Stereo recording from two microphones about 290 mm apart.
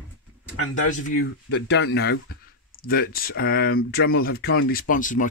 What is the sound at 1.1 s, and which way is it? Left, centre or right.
Speech, left.